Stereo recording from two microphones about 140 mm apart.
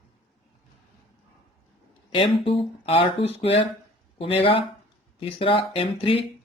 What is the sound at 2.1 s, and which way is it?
Speech, 40° left (ahead or behind).